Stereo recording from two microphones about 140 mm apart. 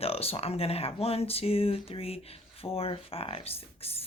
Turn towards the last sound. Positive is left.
turn(degrees=45)  # may be behind; listen again after turning